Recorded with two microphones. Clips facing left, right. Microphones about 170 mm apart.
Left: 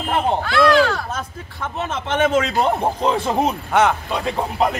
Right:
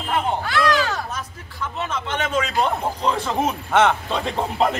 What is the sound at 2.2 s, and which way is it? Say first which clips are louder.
A man's voice: left 4 dB; 30° left (ahead or behind).